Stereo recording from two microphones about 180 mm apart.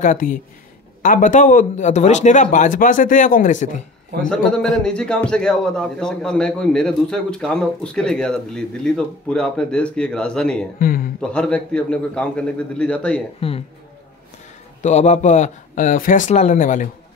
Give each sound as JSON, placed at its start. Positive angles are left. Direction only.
{"t": 0.0, "sound": "speech", "side_deg": 45}
{"t": 4.2, "sound": "a man's voice", "side_deg": 5}
{"t": 10.8, "sound": "speech", "side_deg": 55}
{"t": 11.1, "sound": "a man's voice", "side_deg": 5}
{"t": 13.4, "sound": "speech", "side_deg": 30}
{"t": 14.8, "sound": "speech", "side_deg": 40}